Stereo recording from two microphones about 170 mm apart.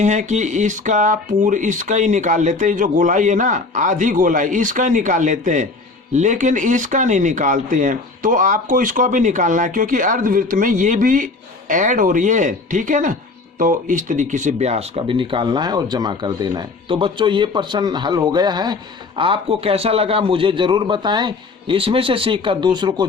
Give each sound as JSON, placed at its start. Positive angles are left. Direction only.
{"t": 0.0, "sound": "speech", "side_deg": -45}